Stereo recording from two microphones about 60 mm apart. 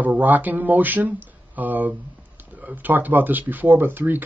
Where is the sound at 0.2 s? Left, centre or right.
Right.